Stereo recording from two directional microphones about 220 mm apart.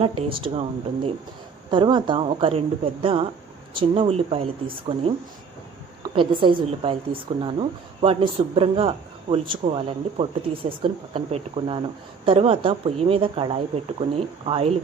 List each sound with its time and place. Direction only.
0.0 s a woman's voice: 25° right (ahead or behind)
6.0 s a woman's voice: 25° right (ahead or behind)